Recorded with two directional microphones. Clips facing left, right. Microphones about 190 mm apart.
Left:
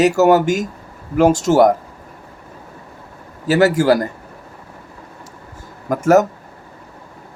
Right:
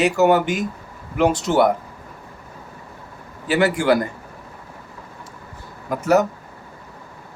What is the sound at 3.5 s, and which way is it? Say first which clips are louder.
Speech: left 4 dB; 40° left (ahead or behind).